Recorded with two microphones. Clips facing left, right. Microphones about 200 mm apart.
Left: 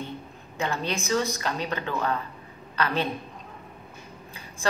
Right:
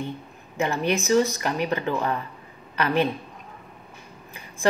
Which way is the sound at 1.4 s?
15° right (ahead or behind).